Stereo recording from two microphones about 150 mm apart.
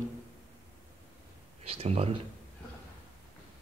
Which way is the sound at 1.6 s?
40° right (ahead or behind).